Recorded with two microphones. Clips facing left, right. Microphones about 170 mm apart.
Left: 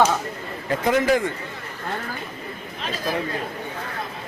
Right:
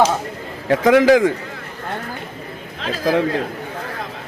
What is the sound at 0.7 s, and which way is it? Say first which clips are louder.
Speech: right 8 dB; 90° right.